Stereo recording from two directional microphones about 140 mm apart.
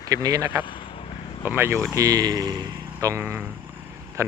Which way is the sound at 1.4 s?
15° right (ahead or behind).